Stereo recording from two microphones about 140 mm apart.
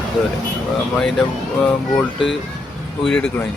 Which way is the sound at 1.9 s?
Centre (ahead or behind).